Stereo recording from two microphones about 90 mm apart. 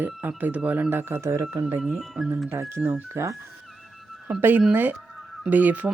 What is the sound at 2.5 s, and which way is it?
Speech, 30° right (ahead or behind).